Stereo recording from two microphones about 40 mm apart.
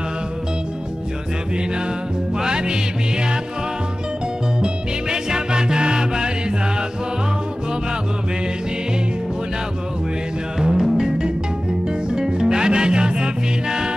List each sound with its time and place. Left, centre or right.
2.3 s music: centre
4.6 s music: centre
10.6 s music: centre